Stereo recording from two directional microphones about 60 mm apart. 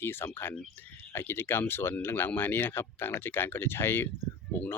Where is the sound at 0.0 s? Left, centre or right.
Left.